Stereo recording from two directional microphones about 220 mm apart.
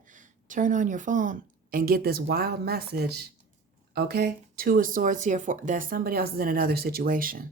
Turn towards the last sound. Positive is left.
turn(degrees=-40)  # may be behind; listen again after turning